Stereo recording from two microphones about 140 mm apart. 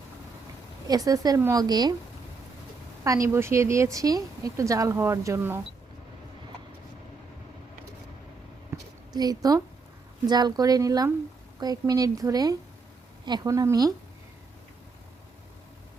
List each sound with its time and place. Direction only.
0.9 s speech: 25° right (ahead or behind)
3.0 s speech: 20° right (ahead or behind)
8.7 s a sound: 30° right (ahead or behind)
10.2 s speech: 30° right (ahead or behind)